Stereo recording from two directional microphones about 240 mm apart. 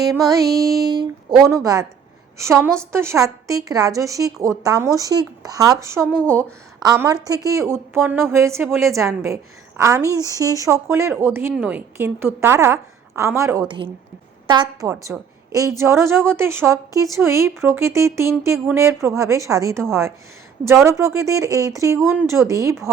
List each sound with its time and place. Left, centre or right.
0.8 s a woman's voice: centre
6.1 s speech: centre
6.7 s a woman's voice: centre